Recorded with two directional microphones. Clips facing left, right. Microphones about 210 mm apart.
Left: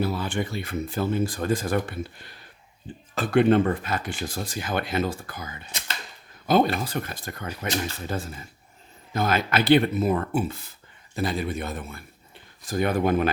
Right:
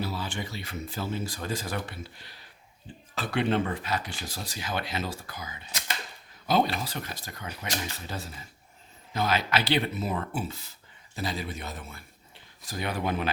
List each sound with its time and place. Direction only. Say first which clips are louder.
0.0 s speech: left 7 dB; 55° left (ahead or behind)